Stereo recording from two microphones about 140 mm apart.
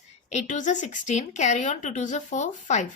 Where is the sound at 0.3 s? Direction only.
60° left (ahead or behind).